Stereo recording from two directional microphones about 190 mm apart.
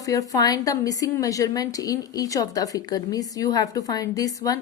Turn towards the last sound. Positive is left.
turn(degrees=20)  # may be behind; listen again after turning